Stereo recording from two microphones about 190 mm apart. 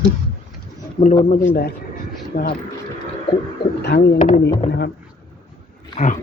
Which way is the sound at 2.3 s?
50° left (ahead or behind).